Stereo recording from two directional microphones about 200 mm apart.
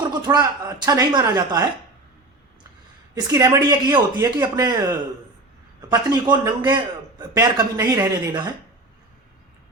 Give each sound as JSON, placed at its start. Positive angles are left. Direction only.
{"t": 0.1, "sound": "a man's voice", "side_deg": -20}
{"t": 3.2, "sound": "a man's voice", "side_deg": -20}